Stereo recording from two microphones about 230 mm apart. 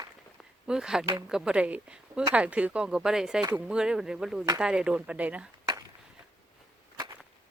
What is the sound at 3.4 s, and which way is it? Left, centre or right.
Speech, centre.